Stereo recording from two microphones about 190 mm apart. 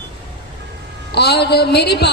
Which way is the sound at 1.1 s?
60° left (ahead or behind).